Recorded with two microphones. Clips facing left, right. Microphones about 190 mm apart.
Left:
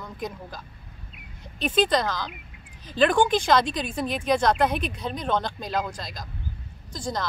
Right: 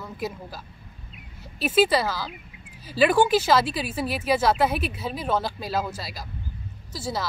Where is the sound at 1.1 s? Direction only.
5° right (ahead or behind).